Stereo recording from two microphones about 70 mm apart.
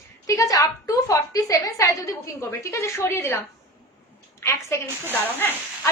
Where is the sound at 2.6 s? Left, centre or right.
Left.